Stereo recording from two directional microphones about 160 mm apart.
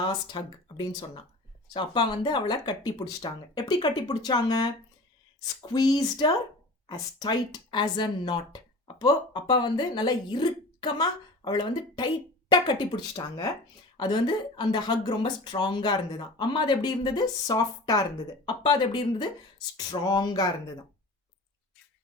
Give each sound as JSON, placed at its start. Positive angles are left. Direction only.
{"t": 0.3, "sound": "a woman's voice", "side_deg": 30}